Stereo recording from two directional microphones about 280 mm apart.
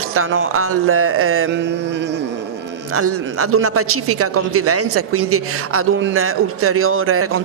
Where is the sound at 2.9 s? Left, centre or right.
Right.